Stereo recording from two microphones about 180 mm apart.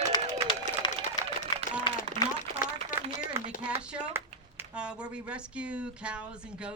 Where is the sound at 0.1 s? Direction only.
20° left (ahead or behind).